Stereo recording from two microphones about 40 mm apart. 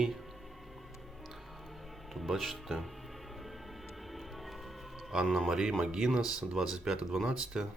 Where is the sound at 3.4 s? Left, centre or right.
Centre.